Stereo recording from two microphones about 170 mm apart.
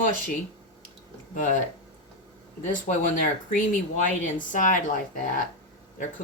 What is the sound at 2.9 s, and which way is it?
Speech, 50° left (ahead or behind).